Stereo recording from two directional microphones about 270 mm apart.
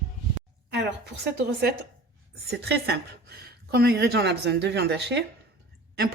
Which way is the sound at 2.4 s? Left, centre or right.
Right.